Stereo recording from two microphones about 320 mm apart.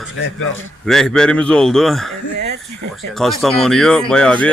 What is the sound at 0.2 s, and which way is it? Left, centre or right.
Speech, left.